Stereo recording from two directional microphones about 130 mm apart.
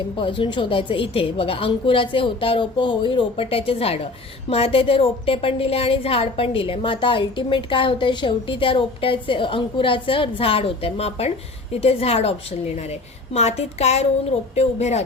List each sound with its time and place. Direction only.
0.2 s a woman's voice: 40° left (ahead or behind); by 15.0 s 55° left (ahead or behind)